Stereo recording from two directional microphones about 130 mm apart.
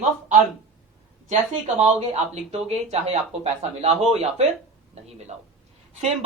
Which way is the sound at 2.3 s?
55° right (ahead or behind).